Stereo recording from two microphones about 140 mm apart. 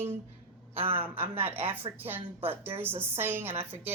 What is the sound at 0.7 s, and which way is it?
Speech, 45° right (ahead or behind).